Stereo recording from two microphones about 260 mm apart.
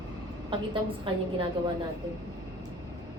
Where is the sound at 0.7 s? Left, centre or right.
Centre.